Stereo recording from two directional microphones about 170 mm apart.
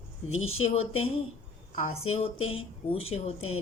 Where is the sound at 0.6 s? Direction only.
35° left (ahead or behind).